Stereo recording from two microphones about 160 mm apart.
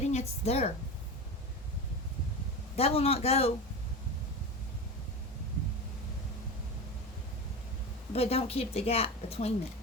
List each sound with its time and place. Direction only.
0.1 s a woman's voice: 45° left (ahead or behind)
2.7 s a woman's voice: 40° left (ahead or behind)
8.1 s a woman's voice: 40° left (ahead or behind)